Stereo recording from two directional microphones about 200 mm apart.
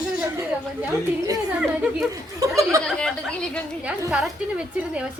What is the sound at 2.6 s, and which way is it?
Speech, 15° right (ahead or behind).